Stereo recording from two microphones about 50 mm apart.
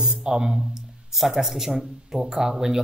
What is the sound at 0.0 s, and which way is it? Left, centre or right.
Speech, centre.